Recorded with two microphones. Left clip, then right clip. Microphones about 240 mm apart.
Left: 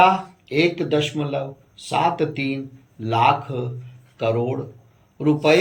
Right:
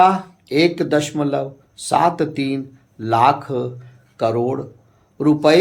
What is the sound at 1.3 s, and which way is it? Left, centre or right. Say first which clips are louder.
Speech: right 4 dB; right.